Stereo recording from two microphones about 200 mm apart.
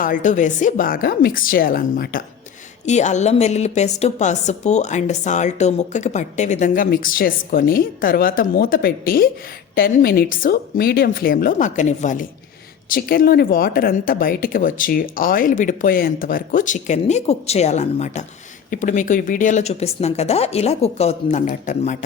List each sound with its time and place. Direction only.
0.0 s speech: 40° left (ahead or behind)
2.8 s a woman's voice: 35° left (ahead or behind)